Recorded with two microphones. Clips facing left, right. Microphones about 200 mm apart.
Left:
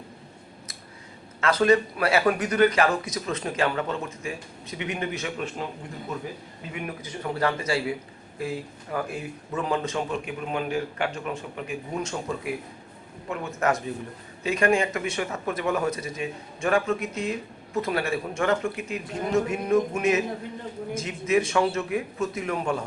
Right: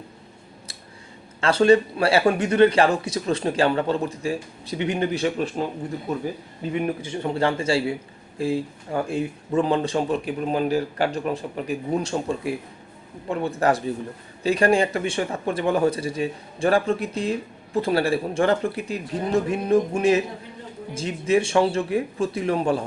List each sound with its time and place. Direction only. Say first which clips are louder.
1.4 s speech: right 4 dB; 30° right (ahead or behind)
6.8 s a man's voice: right 6 dB; 30° right (ahead or behind)